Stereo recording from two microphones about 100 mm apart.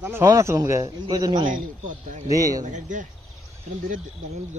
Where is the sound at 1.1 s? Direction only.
45° right (ahead or behind).